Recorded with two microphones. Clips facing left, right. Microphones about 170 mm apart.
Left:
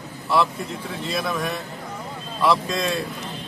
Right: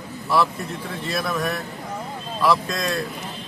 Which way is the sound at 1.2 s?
Centre (ahead or behind).